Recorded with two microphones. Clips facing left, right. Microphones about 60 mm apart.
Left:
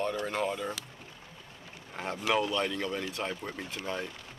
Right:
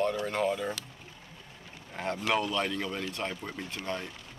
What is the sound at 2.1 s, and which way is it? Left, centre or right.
Speech, centre.